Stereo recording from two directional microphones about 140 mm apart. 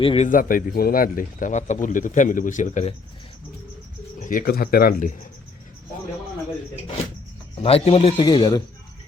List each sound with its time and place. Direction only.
0.0 s speech: 40° left (ahead or behind)
0.3 s speech: 75° left (ahead or behind)
4.2 s speech: 75° left (ahead or behind)
7.6 s speech: 45° left (ahead or behind)